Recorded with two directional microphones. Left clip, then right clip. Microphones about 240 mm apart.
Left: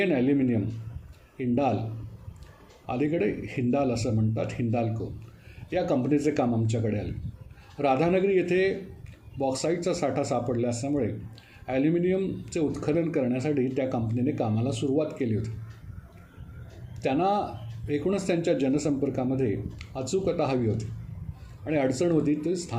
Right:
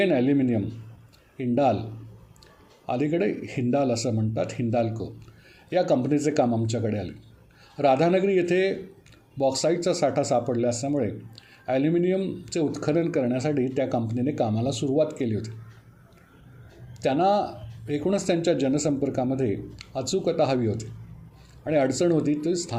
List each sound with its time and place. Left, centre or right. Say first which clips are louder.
0.0 s speech: right 2 dB; right
2.8 s speech: right 2 dB; right
17.0 s speech: right 3 dB; right